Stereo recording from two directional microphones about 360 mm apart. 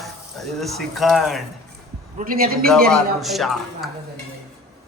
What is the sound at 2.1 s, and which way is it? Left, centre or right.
Speech, right.